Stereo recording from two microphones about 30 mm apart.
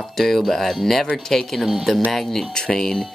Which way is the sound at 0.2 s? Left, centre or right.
Centre.